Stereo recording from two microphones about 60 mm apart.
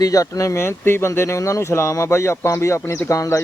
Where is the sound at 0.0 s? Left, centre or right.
Left.